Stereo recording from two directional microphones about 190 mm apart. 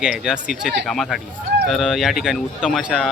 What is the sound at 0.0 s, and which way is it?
A man's voice, 5° right (ahead or behind).